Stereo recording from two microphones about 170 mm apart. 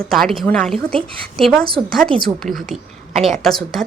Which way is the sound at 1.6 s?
60° right (ahead or behind).